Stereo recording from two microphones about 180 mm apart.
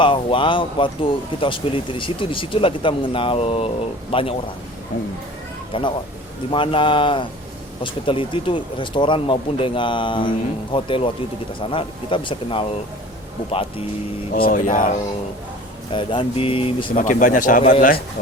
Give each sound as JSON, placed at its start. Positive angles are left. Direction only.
{"t": 0.0, "sound": "speech", "side_deg": 30}
{"t": 5.7, "sound": "speech", "side_deg": 30}
{"t": 14.3, "sound": "speech", "side_deg": 50}
{"t": 15.9, "sound": "speech", "side_deg": 25}
{"t": 16.9, "sound": "speech", "side_deg": 45}